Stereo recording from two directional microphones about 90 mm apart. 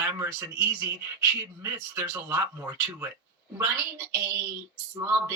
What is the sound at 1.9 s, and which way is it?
Speech, 20° right (ahead or behind).